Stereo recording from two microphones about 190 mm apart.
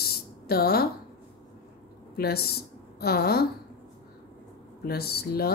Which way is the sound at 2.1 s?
55° left (ahead or behind).